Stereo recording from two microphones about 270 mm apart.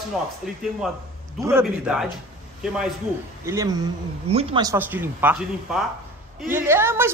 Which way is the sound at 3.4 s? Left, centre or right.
Centre.